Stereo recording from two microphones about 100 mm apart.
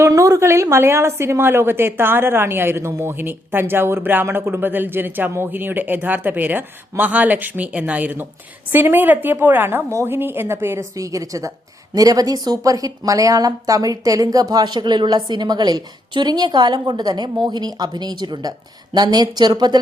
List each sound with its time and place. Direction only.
0.1 s a woman's voice: 30° right (ahead or behind)